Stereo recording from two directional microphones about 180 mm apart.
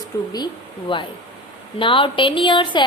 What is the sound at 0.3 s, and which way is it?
A woman's voice, 25° left (ahead or behind).